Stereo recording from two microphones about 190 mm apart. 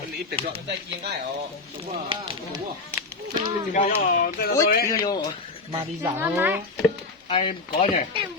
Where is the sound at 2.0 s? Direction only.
30° right (ahead or behind).